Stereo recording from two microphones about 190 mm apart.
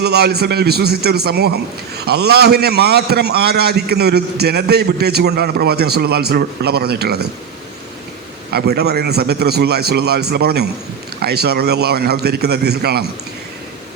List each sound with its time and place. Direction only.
0.0 s a man's voice: 60° right (ahead or behind)
8.4 s a man's voice: 55° right (ahead or behind)